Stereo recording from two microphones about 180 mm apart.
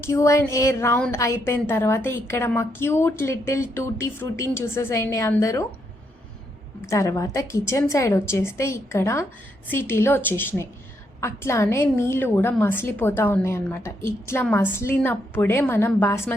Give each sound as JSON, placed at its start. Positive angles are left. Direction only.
{"t": 0.0, "sound": "a woman's voice", "side_deg": 15}
{"t": 6.8, "sound": "a woman's voice", "side_deg": 15}